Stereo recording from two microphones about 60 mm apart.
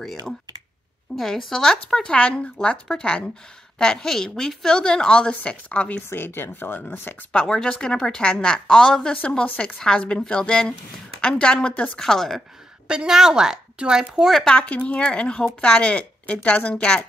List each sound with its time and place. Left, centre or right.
1.1 s a woman's voice: centre
2.1 s a woman's voice: left
6.0 s speech: left
7.3 s a woman's voice: centre
12.0 s a woman's voice: centre
12.8 s a woman's voice: centre
14.4 s a woman's voice: centre